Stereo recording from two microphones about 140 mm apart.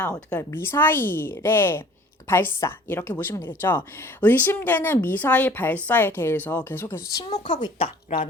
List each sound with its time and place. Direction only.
0.0 s speech: 10° left (ahead or behind)
7.3 s a woman's voice: 55° left (ahead or behind)
7.5 s speech: 35° left (ahead or behind)